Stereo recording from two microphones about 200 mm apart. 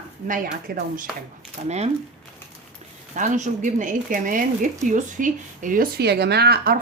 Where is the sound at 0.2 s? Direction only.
40° right (ahead or behind).